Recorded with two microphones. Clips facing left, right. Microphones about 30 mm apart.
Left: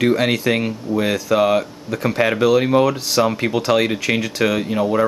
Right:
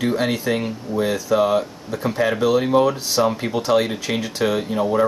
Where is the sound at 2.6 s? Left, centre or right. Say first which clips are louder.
Left 1 dB; left.